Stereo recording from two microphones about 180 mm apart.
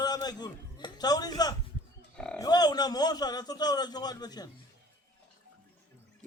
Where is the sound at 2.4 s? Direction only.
20° left (ahead or behind).